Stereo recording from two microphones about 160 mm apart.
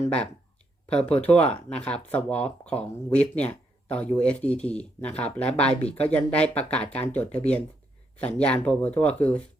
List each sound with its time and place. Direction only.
1.2 s speech: 10° left (ahead or behind)
7.3 s speech: 45° left (ahead or behind)
8.2 s speech: 10° left (ahead or behind)